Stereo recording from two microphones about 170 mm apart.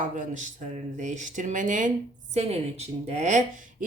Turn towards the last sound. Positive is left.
turn(degrees=-50)  # may be behind; listen again after turning